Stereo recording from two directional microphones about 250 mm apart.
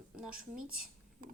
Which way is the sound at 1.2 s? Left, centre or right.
Right.